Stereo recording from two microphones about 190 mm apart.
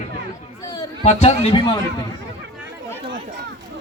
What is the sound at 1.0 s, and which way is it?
Speech, 35° left (ahead or behind).